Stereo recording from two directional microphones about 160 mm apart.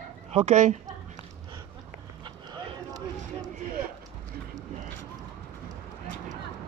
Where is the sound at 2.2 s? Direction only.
30° right (ahead or behind).